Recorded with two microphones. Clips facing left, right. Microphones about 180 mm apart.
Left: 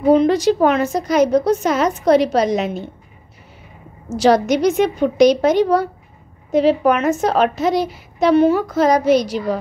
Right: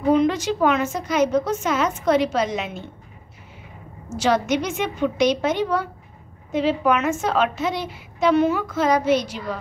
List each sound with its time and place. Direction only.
0.0 s a woman's voice: 35° left (ahead or behind)
4.1 s a woman's voice: 35° left (ahead or behind)